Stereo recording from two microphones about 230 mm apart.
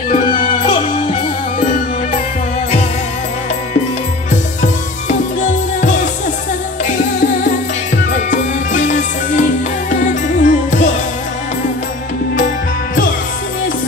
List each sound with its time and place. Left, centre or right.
0.1 s music: left
0.6 s music: centre
5.0 s music: left
8.1 s music: left